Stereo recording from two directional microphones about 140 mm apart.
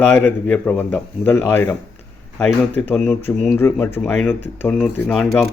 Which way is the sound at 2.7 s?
15° left (ahead or behind).